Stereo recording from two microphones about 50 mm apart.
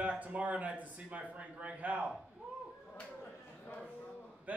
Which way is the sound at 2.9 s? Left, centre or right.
Left.